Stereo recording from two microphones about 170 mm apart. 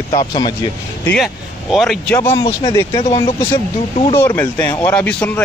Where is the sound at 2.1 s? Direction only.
20° left (ahead or behind).